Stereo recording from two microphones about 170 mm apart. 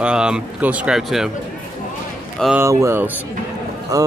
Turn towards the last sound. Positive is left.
turn(degrees=-20)  # may be behind; listen again after turning